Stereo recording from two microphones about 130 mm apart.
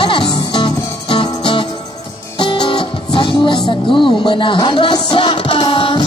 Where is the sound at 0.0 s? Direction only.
40° left (ahead or behind).